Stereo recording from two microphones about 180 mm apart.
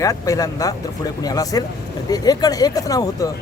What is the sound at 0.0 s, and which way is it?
Speech, 20° left (ahead or behind).